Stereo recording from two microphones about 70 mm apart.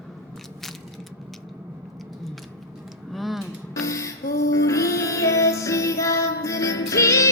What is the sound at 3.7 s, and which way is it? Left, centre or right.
Music, left.